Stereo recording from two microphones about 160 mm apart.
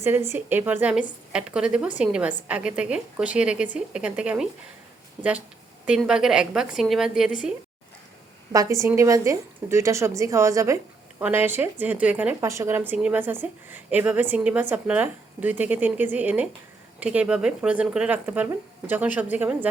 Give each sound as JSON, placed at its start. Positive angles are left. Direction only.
{"t": 0.0, "sound": "a woman's voice", "side_deg": -15}
{"t": 5.8, "sound": "a woman's voice", "side_deg": -5}
{"t": 8.5, "sound": "a woman's voice", "side_deg": -20}